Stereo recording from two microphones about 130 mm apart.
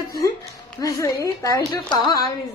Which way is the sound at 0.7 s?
25° left (ahead or behind).